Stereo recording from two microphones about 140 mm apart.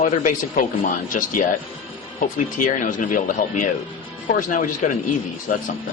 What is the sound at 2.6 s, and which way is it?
Speech, 65° left (ahead or behind).